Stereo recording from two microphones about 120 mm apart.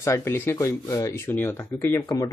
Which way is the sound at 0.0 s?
20° left (ahead or behind).